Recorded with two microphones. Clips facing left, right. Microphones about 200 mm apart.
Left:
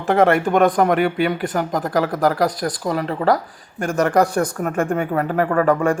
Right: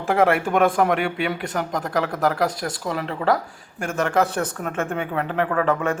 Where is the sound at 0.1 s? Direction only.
Centre (ahead or behind).